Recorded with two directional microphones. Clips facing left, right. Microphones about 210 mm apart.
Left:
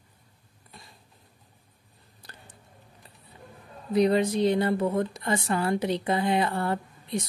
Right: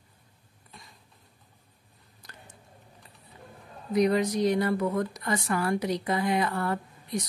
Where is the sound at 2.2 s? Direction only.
35° left (ahead or behind).